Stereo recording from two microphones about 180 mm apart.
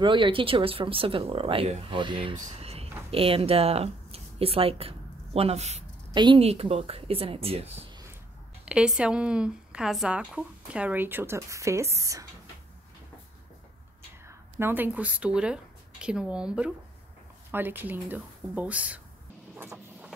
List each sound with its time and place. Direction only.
0.0 s speech: 25° right (ahead or behind)
6.1 s speech: 25° right (ahead or behind)
8.6 s speech: 5° right (ahead or behind)
14.2 s speech: 10° right (ahead or behind)
19.5 s a sound: 10° right (ahead or behind)